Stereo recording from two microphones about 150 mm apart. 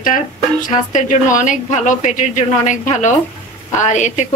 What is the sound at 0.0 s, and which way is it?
Speech, 65° left (ahead or behind).